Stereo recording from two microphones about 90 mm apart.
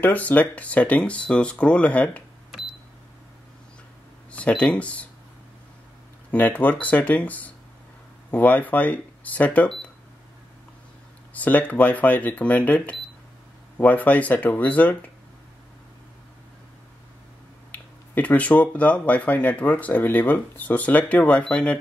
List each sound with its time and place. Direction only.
0.0 s speech: 20° left (ahead or behind)
4.3 s speech: 15° left (ahead or behind)
6.3 s speech: 20° left (ahead or behind)
11.3 s speech: 15° left (ahead or behind)
17.6 s speech: 20° left (ahead or behind)